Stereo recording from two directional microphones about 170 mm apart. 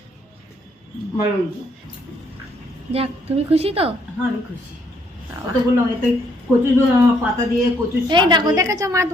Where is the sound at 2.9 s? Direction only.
35° right (ahead or behind).